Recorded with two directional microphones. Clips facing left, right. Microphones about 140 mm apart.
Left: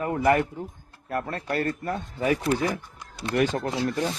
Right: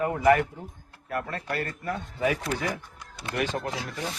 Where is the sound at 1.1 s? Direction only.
35° left (ahead or behind).